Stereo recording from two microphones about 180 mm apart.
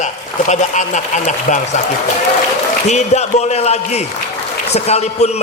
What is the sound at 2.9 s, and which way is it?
A man's voice, 40° left (ahead or behind).